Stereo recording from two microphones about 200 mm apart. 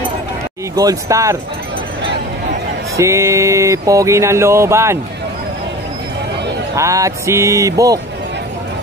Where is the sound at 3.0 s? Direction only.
15° right (ahead or behind).